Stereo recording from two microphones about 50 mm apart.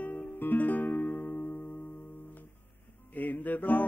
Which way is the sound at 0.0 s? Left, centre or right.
Left.